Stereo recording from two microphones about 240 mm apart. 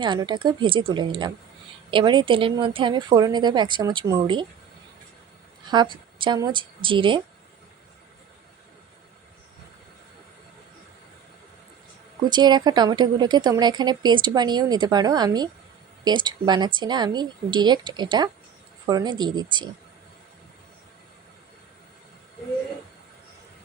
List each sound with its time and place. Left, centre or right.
0.0 s speech: centre
5.6 s a woman's voice: centre
12.2 s speech: centre